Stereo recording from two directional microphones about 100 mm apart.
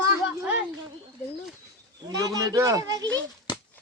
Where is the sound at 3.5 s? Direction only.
45° left (ahead or behind).